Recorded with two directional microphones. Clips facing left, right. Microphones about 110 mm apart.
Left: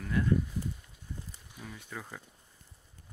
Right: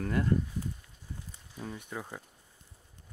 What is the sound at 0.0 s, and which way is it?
Speech, 45° right (ahead or behind).